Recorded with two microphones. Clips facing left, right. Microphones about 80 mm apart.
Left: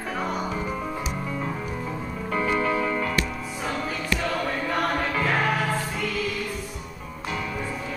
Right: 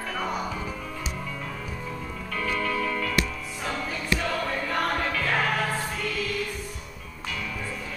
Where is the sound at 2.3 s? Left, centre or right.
Left.